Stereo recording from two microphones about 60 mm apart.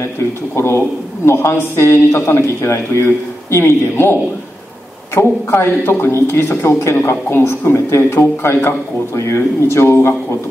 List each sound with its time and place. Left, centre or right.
0.6 s speech: left